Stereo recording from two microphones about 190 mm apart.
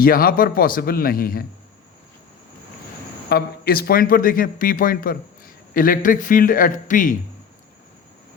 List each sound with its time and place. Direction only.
0.0 s speech: 50° left (ahead or behind)
3.2 s speech: 60° left (ahead or behind)